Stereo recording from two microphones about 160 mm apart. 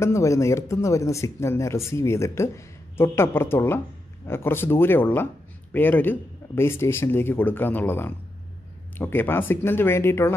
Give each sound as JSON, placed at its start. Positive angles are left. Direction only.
{"t": 0.0, "sound": "speech", "side_deg": 20}